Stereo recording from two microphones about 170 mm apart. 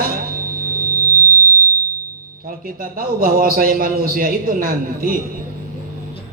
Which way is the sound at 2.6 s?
60° right (ahead or behind).